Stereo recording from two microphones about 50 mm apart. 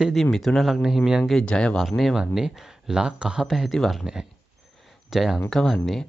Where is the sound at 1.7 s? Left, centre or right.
Centre.